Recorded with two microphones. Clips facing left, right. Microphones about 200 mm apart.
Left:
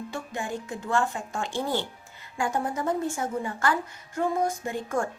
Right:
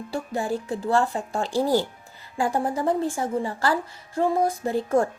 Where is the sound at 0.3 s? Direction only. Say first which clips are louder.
Right 7 dB; 35° right (ahead or behind).